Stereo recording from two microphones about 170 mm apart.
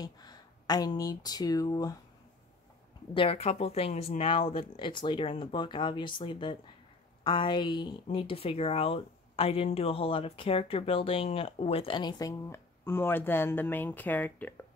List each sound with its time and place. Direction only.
0.0 s speech: 25° left (ahead or behind)
3.2 s speech: 35° left (ahead or behind); by 14.5 s 10° left (ahead or behind)